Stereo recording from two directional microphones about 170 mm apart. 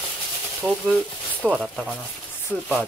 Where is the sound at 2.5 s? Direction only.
10° left (ahead or behind).